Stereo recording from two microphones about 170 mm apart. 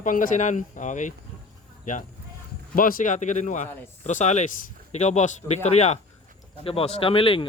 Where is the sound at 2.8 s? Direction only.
55° left (ahead or behind); by 7.4 s 30° left (ahead or behind).